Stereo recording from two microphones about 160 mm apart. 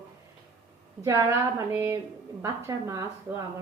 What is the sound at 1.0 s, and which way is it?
A woman's voice, 15° right (ahead or behind).